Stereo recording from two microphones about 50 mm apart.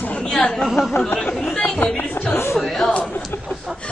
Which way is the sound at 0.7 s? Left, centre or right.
Centre.